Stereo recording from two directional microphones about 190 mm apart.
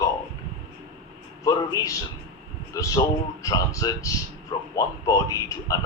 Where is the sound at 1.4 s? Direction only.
15° left (ahead or behind).